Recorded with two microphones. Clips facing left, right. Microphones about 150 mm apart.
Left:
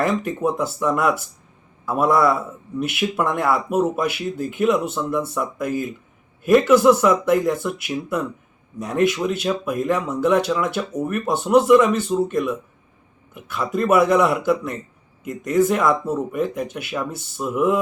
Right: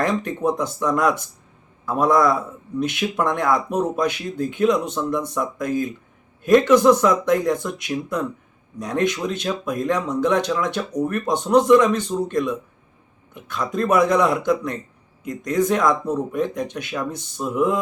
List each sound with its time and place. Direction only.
0.0 s a man's voice: 5° left (ahead or behind)